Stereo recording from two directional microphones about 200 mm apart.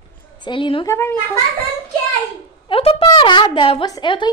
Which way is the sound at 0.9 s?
10° left (ahead or behind).